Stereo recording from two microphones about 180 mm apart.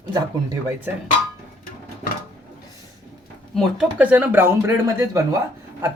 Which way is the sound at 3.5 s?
5° right (ahead or behind).